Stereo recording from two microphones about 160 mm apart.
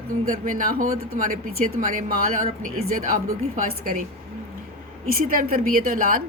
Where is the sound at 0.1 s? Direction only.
55° right (ahead or behind).